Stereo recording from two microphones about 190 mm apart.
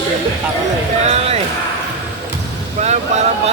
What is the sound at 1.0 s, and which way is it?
Speech, 35° right (ahead or behind).